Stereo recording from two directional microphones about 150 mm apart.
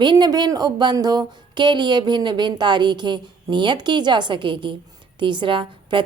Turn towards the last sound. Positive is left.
turn(degrees=-35)  # may be behind; listen again after turning